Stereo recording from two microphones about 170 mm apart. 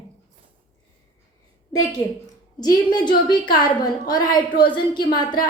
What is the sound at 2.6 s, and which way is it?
A woman's voice, 25° left (ahead or behind).